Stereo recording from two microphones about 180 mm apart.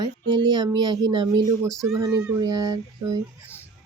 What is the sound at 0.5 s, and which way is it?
Speech, 25° right (ahead or behind).